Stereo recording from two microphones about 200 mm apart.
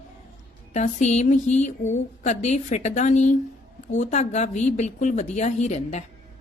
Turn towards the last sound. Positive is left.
turn(degrees=35)  # may be behind; listen again after turning